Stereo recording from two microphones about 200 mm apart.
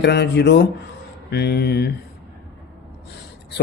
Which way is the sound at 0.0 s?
55° left (ahead or behind).